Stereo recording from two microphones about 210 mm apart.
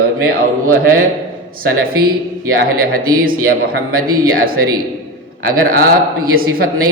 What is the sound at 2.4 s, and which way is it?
A man's voice, 45° right (ahead or behind).